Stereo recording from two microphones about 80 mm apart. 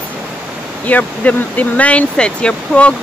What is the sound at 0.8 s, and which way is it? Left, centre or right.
Speech, centre.